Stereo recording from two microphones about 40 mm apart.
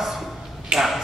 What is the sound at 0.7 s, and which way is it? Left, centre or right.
Speech, centre.